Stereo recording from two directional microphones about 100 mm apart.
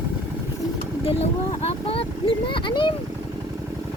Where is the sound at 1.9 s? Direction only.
70° left (ahead or behind); by 2.9 s 50° left (ahead or behind).